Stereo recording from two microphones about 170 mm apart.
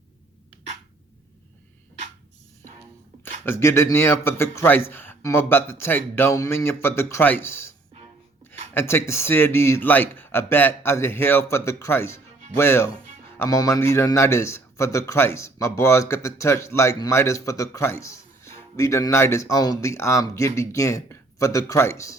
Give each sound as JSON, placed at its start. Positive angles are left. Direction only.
{"t": 3.4, "sound": "speech", "side_deg": 15}
{"t": 8.7, "sound": "speech", "side_deg": 15}